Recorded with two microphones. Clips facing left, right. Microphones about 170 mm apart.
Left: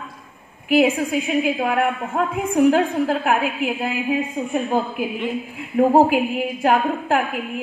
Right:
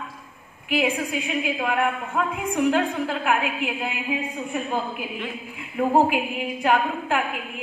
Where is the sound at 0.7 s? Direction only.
45° left (ahead or behind).